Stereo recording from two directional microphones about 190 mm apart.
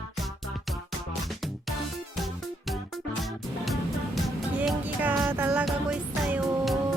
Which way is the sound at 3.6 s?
Centre (ahead or behind).